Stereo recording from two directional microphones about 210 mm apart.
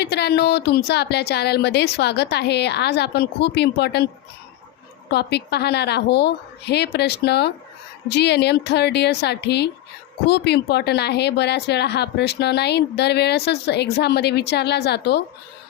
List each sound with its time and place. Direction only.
0.0 s a woman's voice: 50° left (ahead or behind)
5.1 s a woman's voice: 50° left (ahead or behind)